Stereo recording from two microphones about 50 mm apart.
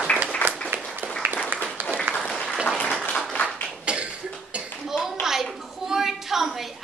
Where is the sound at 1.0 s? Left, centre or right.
Right.